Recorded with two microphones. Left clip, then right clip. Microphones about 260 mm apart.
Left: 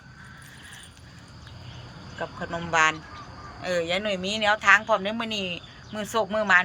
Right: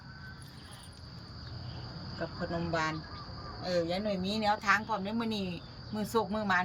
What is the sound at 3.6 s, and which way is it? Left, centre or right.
Speech, left.